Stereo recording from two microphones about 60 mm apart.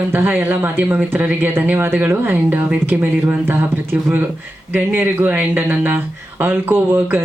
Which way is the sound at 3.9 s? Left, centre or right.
Right.